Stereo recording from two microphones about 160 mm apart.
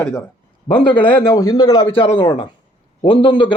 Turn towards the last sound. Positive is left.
turn(degrees=30)  # may be behind; listen again after turning